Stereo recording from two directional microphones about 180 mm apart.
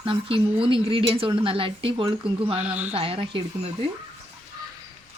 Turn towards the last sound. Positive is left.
turn(degrees=-30)  # may be behind; listen again after turning